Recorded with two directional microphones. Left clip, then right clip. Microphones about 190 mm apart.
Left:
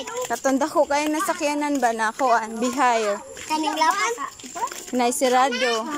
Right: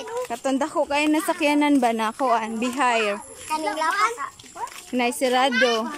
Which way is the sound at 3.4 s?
15° left (ahead or behind).